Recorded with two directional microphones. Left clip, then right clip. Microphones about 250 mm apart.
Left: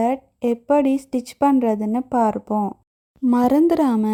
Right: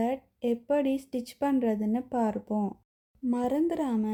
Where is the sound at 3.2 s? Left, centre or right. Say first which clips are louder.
Left 11 dB; left.